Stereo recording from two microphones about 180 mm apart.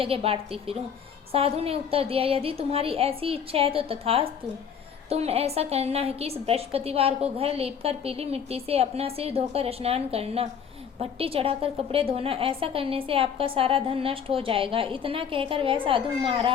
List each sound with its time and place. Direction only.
0.0 s a woman's voice: 30° right (ahead or behind)